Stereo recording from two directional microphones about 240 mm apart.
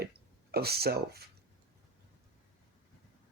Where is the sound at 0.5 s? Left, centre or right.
Right.